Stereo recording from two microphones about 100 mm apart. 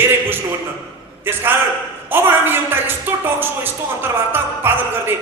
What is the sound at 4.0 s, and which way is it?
Music, 20° right (ahead or behind).